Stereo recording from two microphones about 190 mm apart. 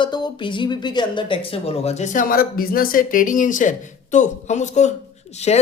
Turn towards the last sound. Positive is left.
turn(degrees=35)  # may be behind; listen again after turning